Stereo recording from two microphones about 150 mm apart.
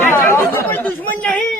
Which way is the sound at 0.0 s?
15° left (ahead or behind).